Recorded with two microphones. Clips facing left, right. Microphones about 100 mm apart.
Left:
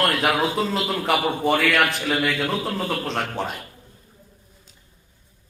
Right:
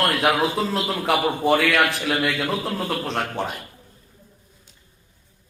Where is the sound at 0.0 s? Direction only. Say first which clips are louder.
Right 1 dB; centre (ahead or behind).